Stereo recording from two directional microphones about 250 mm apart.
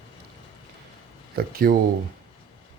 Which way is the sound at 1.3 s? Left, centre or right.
Right.